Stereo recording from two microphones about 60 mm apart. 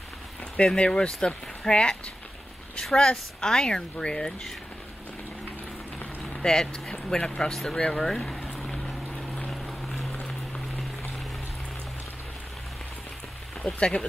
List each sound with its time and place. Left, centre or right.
0.7 s speech: centre
6.4 s speech: centre
9.5 s a sound: centre
13.7 s speech: centre